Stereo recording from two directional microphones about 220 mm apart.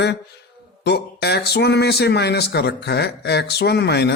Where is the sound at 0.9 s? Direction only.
50° left (ahead or behind).